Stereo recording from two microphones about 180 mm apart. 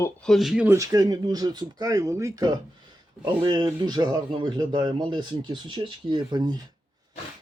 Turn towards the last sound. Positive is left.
turn(degrees=-25)  # may be behind; listen again after turning